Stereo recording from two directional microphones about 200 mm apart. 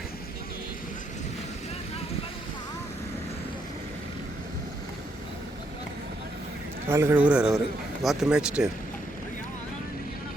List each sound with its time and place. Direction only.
6.8 s speech: 10° right (ahead or behind)